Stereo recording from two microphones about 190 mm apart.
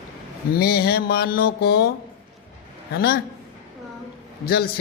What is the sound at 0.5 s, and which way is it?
Mantra, 55° left (ahead or behind).